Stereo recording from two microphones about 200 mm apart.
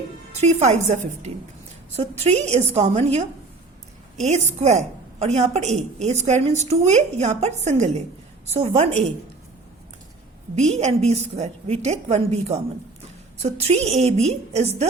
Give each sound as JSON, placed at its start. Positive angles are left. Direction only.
{"t": 0.3, "sound": "a woman's voice", "side_deg": -35}
{"t": 10.5, "sound": "a woman's voice", "side_deg": -35}